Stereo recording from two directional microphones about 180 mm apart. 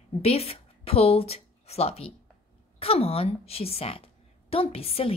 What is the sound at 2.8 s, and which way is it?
A woman's voice, 35° left (ahead or behind).